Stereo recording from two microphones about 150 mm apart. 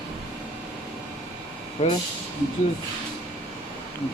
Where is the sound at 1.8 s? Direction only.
45° left (ahead or behind).